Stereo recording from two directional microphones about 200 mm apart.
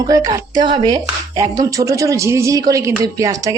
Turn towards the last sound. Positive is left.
turn(degrees=-15)  # may be behind; listen again after turning